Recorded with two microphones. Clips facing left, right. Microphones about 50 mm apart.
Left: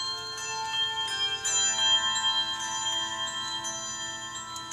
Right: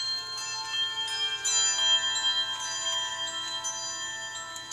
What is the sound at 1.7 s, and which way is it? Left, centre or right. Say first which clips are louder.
Bell: left 1 dB; centre.